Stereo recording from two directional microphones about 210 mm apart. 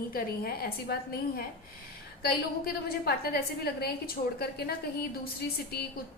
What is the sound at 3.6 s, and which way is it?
A woman's voice, 45° left (ahead or behind).